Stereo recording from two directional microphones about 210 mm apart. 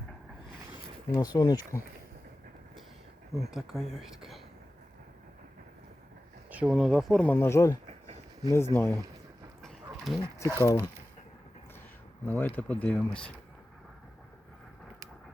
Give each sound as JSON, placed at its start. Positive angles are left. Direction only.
{"t": 1.1, "sound": "speech", "side_deg": 20}
{"t": 3.3, "sound": "speech", "side_deg": 0}
{"t": 6.5, "sound": "speech", "side_deg": -5}
{"t": 9.6, "sound": "dog", "side_deg": 0}
{"t": 10.2, "sound": "speech", "side_deg": 15}
{"t": 12.2, "sound": "speech", "side_deg": 10}